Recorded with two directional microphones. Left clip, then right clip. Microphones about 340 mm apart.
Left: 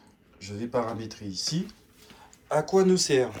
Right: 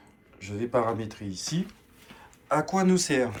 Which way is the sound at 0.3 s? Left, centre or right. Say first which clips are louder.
Right 3 dB; centre.